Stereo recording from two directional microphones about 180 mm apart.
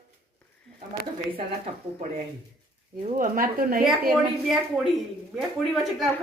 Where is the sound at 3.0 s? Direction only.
50° right (ahead or behind).